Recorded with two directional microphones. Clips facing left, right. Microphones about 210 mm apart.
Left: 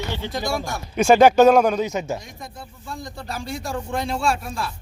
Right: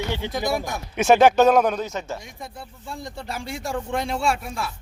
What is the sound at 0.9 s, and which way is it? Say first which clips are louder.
Speech: left 2 dB; centre (ahead or behind).